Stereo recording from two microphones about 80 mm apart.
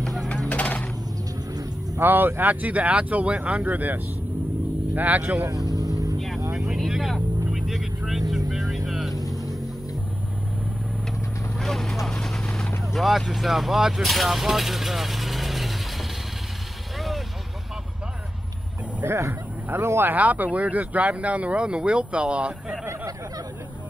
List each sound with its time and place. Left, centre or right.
0.0 s a sound: centre
0.5 s mechanisms: centre
2.0 s speech: right
5.5 s music: right
6.1 s vehicle: centre
7.2 s vehicle: centre
7.6 s vehicle: centre
11.5 s vehicle: centre
13.3 s speech: centre
19.0 s speech: right; by 22.8 s centre
22.8 s a sound: right